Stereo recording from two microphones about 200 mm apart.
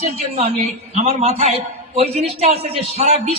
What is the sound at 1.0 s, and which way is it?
A man's voice, 30° right (ahead or behind).